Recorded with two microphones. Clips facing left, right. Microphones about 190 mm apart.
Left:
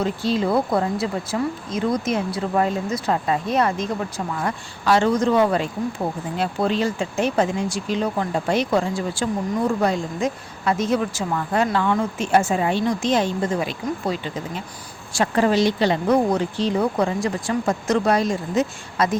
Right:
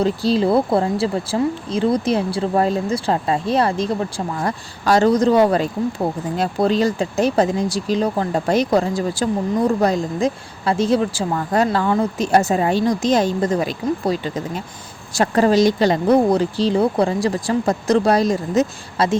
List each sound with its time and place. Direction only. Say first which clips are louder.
0.0 s speech: right 4 dB; 35° right (ahead or behind)